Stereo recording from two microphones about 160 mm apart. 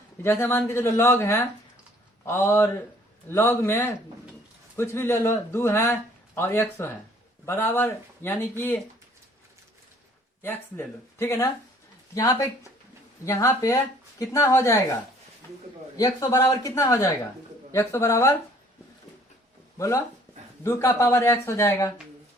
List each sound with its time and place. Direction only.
0.2 s speech: 15° left (ahead or behind)
10.4 s speech: 15° left (ahead or behind)
16.0 s speech: 20° left (ahead or behind)
20.7 s speech: 15° left (ahead or behind)